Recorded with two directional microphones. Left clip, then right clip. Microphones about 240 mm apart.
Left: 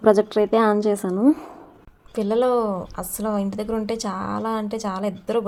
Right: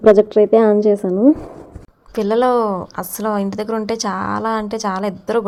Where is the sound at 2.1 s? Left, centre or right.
Centre.